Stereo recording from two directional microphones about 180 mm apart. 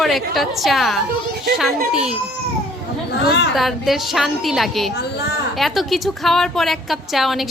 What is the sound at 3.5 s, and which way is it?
A woman's voice, centre (ahead or behind).